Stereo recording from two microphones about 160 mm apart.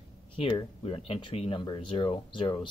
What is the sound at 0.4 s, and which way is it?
Speech, 35° left (ahead or behind).